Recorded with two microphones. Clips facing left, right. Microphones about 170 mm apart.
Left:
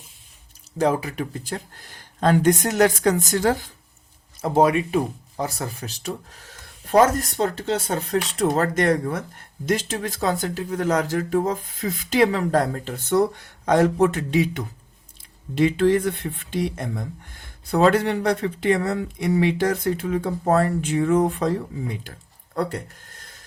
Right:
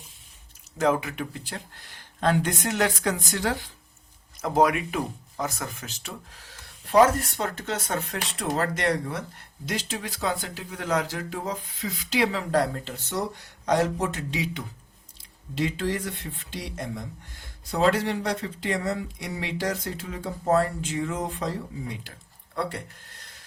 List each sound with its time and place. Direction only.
0.8 s speech: 35° left (ahead or behind)
4.4 s speech: 30° left (ahead or behind); by 21.5 s 55° left (ahead or behind)